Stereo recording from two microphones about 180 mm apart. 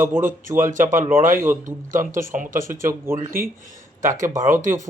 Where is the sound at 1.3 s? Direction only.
15° right (ahead or behind).